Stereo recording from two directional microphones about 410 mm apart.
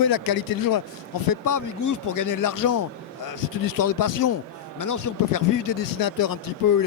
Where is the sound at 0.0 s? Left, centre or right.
Left.